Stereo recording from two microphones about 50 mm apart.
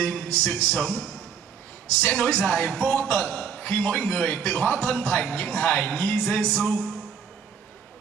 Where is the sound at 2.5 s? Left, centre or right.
Left.